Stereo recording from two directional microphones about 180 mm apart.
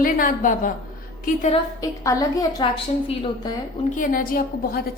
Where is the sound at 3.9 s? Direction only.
50° left (ahead or behind).